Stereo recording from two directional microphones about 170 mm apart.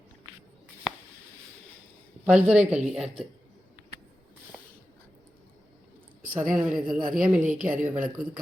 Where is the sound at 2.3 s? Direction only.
5° right (ahead or behind).